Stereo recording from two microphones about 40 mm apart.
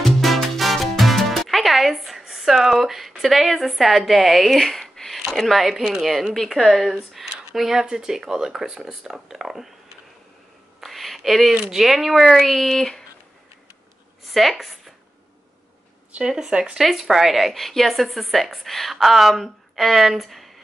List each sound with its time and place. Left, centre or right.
0.0 s music: centre
2.6 s speech: centre
10.8 s a sound: centre
11.7 s speech: centre
14.3 s speech: centre
16.3 s speech: centre
16.7 s speech: centre